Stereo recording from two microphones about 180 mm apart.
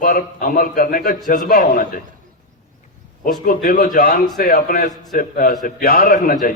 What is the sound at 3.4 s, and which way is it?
A man's voice, 50° left (ahead or behind).